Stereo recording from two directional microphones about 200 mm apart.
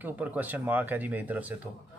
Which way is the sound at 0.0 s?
10° right (ahead or behind).